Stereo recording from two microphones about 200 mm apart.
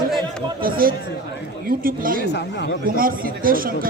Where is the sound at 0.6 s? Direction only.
45° right (ahead or behind).